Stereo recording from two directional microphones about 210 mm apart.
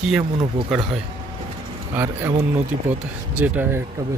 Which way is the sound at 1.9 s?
10° right (ahead or behind).